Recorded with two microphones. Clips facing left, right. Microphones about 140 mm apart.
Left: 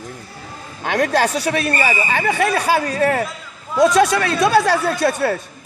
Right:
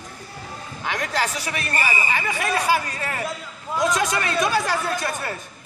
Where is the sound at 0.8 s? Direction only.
75° left (ahead or behind).